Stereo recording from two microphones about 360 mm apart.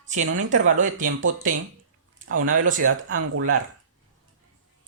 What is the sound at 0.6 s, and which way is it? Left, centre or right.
Speech, right.